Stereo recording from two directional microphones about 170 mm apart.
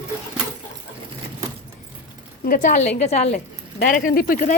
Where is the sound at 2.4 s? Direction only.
50° left (ahead or behind).